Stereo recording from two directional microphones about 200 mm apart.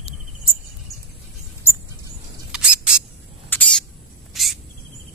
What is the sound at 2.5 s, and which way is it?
Mouse, 5° right (ahead or behind).